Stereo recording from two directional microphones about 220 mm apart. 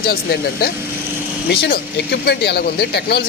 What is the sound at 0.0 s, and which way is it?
Speech, 45° left (ahead or behind).